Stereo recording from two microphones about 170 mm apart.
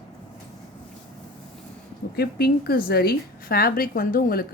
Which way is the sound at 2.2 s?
65° left (ahead or behind).